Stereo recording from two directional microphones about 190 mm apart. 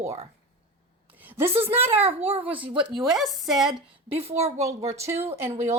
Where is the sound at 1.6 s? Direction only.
10° right (ahead or behind).